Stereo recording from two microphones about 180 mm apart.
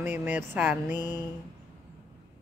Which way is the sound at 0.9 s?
20° left (ahead or behind).